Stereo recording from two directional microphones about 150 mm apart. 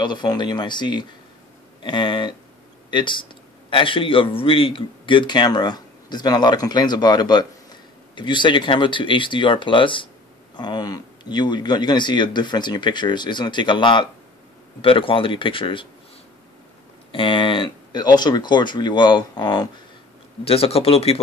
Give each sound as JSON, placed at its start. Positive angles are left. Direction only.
{"t": 0.0, "sound": "speech", "side_deg": 30}
{"t": 17.1, "sound": "speech", "side_deg": 35}
{"t": 20.4, "sound": "speech", "side_deg": 40}